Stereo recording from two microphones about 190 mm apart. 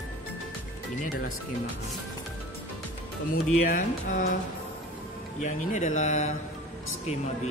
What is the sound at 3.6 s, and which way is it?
Speech, 45° left (ahead or behind).